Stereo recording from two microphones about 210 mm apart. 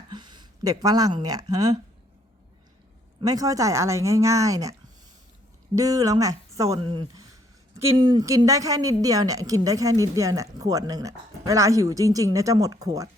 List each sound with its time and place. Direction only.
0.1 s speech: 20° right (ahead or behind)
3.2 s a woman's voice: 15° right (ahead or behind)
5.7 s a woman's voice: 15° right (ahead or behind)